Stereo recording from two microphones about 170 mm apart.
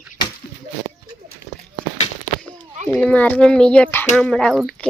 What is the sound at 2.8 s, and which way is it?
Speech, 5° left (ahead or behind).